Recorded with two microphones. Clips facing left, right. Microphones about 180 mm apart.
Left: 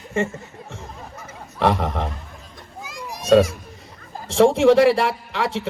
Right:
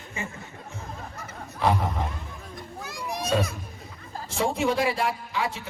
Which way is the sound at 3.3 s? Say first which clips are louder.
Left 12 dB; 80° left.